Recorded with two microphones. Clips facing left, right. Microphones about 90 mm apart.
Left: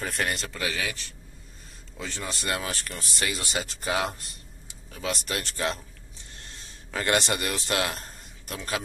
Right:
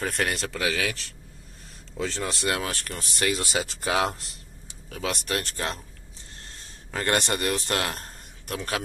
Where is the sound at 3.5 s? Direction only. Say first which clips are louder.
Right 3 dB; 70° right (ahead or behind); by 5.5 s 55° right (ahead or behind).